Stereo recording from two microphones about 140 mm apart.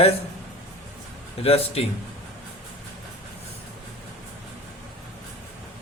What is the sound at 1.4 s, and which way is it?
Speech, 45° left (ahead or behind).